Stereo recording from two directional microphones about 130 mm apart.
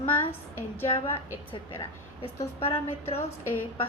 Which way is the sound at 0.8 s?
45° left (ahead or behind).